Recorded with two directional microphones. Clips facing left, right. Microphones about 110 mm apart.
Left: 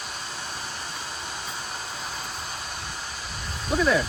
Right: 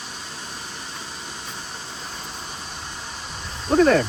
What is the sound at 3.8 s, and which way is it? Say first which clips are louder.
Speech: right 6 dB; 55° right (ahead or behind).